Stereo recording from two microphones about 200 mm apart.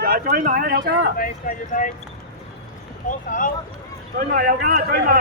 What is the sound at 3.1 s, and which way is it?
Speech, 40° left (ahead or behind).